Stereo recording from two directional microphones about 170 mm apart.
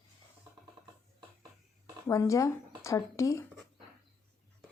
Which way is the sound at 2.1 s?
20° left (ahead or behind).